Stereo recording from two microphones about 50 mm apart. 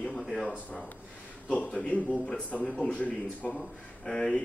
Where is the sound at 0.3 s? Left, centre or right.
Centre.